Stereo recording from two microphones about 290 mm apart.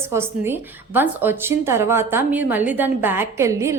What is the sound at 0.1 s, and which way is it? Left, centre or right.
A woman's voice, centre.